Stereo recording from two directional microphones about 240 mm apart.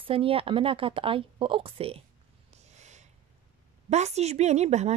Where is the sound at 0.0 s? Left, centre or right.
Right.